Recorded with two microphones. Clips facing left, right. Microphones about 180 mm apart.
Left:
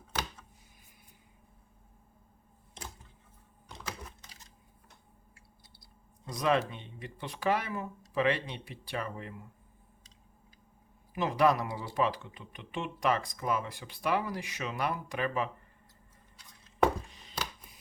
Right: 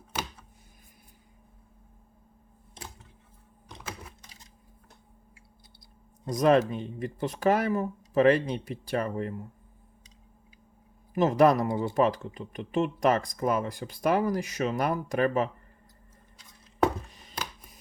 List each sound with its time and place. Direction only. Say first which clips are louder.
0.1 s a sound: right 2 dB; 10° right (ahead or behind)
6.2 s speech: right 7 dB; 45° right (ahead or behind)
11.1 s speech: right 6 dB; 45° right (ahead or behind)